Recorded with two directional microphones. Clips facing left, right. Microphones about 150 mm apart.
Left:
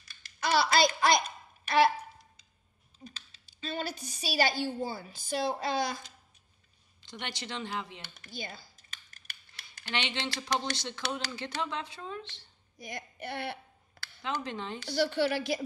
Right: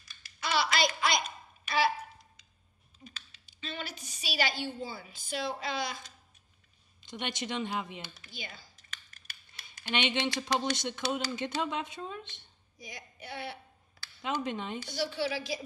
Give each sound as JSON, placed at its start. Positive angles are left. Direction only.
{"t": 0.4, "sound": "speech", "side_deg": 40}
{"t": 3.0, "sound": "a woman's voice", "side_deg": 30}
{"t": 7.1, "sound": "speech", "side_deg": -20}
{"t": 8.0, "sound": "speech", "side_deg": 45}
{"t": 9.8, "sound": "speech", "side_deg": -20}
{"t": 12.7, "sound": "a sound", "side_deg": 55}
{"t": 14.2, "sound": "speech", "side_deg": -20}
{"t": 15.0, "sound": "a woman's voice", "side_deg": 55}